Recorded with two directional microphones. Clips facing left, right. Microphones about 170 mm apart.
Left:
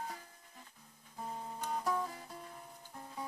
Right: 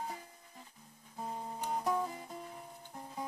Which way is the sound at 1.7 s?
20° right (ahead or behind).